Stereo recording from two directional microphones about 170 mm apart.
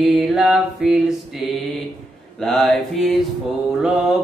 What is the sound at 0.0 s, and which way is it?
Mantra, centre (ahead or behind).